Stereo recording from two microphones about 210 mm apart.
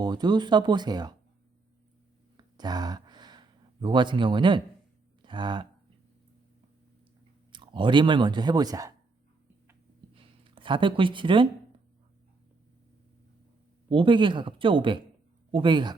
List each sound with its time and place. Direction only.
0.0 s speech: 20° right (ahead or behind)
2.6 s a sound: 20° right (ahead or behind)
5.2 s speech: 20° right (ahead or behind)
7.5 s speech: 20° right (ahead or behind)
10.2 s a sound: 25° right (ahead or behind)
13.9 s speech: 25° right (ahead or behind)